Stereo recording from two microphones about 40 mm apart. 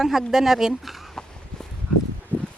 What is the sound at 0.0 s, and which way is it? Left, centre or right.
Speech, centre.